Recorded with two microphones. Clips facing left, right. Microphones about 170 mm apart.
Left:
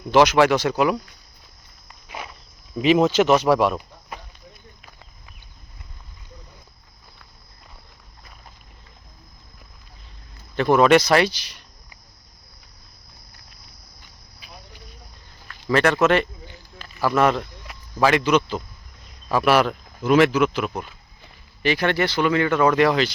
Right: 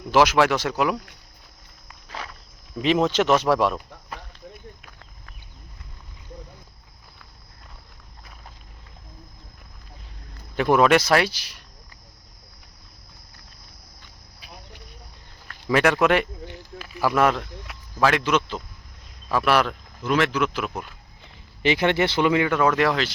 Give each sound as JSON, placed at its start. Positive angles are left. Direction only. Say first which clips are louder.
{"t": 0.1, "sound": "speech", "louder": "left 3 dB", "side_deg": -5}
{"t": 2.0, "sound": "walk", "louder": "left 1 dB", "side_deg": 15}
{"t": 2.7, "sound": "speech", "louder": "left 4 dB", "side_deg": 5}
{"t": 10.6, "sound": "speech", "louder": "left 2 dB", "side_deg": -5}
{"t": 15.6, "sound": "speech", "louder": "left 1 dB", "side_deg": -10}
{"t": 21.6, "sound": "speech", "louder": "right 1 dB", "side_deg": -20}
{"t": 22.5, "sound": "speech", "louder": "left 3 dB", "side_deg": 0}